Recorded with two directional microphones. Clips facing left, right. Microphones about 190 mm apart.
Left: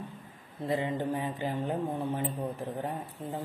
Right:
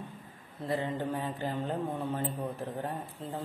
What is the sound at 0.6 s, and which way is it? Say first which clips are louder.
A man's voice: left 2 dB; 15° left (ahead or behind).